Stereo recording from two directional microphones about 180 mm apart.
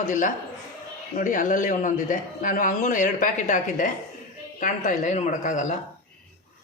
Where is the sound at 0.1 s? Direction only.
45° left (ahead or behind).